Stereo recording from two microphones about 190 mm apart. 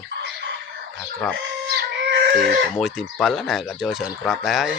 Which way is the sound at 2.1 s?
60° right (ahead or behind).